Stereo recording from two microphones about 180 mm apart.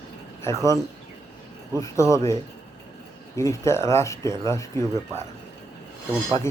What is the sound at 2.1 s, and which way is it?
Speech, 15° left (ahead or behind).